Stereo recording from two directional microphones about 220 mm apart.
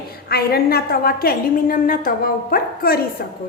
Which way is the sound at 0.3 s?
45° left (ahead or behind).